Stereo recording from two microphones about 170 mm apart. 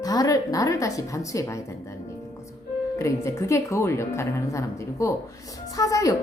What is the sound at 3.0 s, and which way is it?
Speech, 15° left (ahead or behind).